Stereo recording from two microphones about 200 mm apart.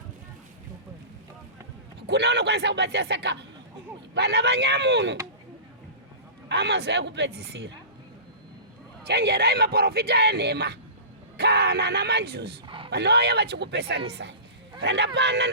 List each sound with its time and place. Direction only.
2.0 s speech: 55° right (ahead or behind)
6.5 s speech: 55° right (ahead or behind)
9.0 s speech: 55° right (ahead or behind)
12.6 s a sound: 25° right (ahead or behind)
12.9 s speech: 55° right (ahead or behind)